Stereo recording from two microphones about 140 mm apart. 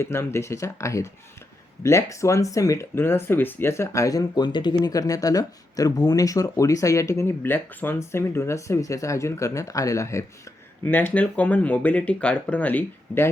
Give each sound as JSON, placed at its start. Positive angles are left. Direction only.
{"t": 0.0, "sound": "speech", "side_deg": 20}